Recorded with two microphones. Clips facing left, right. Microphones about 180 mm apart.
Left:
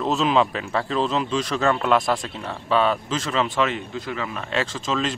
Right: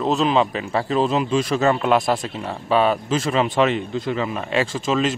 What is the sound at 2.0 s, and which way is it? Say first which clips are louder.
Speech: right 2 dB; 25° right (ahead or behind).